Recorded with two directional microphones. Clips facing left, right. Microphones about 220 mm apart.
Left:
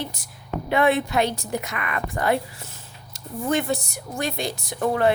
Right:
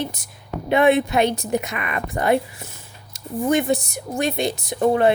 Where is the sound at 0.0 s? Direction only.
20° right (ahead or behind).